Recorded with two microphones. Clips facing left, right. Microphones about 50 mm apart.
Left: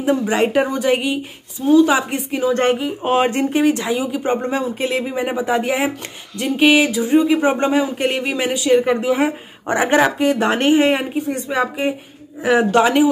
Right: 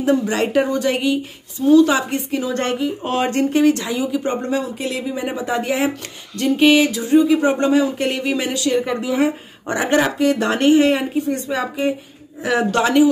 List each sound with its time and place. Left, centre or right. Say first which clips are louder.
0.0 s speech: left 1 dB; centre
8.7 s speech: left 5 dB; left